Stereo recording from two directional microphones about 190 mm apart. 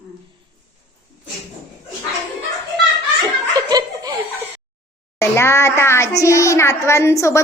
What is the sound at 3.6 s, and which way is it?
Laughter, 20° right (ahead or behind).